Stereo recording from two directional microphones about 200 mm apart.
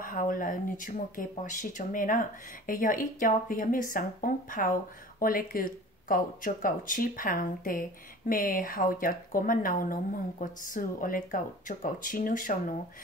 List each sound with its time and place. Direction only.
0.0 s speech: 40° left (ahead or behind)